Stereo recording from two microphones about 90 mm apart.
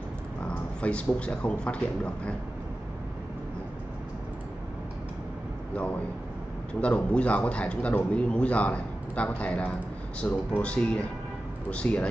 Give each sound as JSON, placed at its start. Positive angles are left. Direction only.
{"t": 0.4, "sound": "a sound", "side_deg": 10}
{"t": 1.2, "sound": "a man's voice", "side_deg": 10}
{"t": 6.7, "sound": "a man's voice", "side_deg": 15}